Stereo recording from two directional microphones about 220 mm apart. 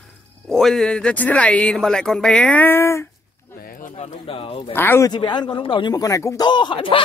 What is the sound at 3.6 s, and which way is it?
Speech, 35° left (ahead or behind).